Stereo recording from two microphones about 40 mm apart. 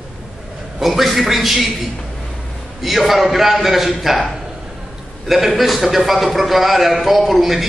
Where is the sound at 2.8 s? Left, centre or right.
Centre.